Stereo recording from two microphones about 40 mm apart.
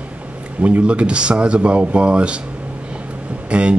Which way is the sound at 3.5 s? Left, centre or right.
Right.